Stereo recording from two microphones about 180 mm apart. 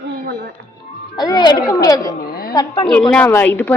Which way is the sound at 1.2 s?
25° left (ahead or behind).